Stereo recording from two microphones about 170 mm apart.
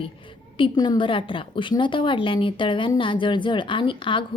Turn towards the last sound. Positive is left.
turn(degrees=30)  # may be behind; listen again after turning